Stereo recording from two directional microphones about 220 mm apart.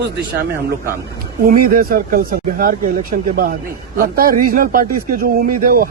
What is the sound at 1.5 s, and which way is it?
Speech, 40° right (ahead or behind).